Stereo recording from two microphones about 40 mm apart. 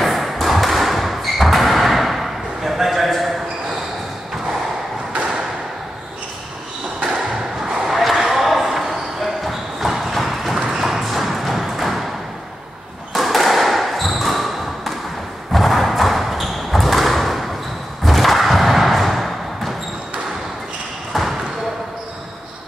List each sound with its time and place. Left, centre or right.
0.0 s thump: centre
7.0 s a sound: right
7.8 s basketball bounce: centre
10.7 s thump: centre
13.1 s a sound: centre
21.1 s basketball bounce: centre